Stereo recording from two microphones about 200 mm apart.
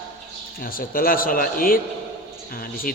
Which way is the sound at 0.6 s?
45° left (ahead or behind).